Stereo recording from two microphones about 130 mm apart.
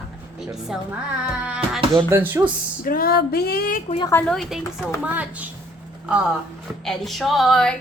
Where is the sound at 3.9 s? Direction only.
70° left (ahead or behind).